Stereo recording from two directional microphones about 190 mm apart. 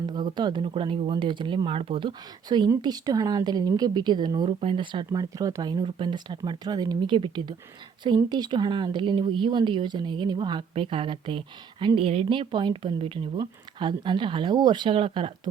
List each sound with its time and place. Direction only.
0.0 s speech: 20° right (ahead or behind)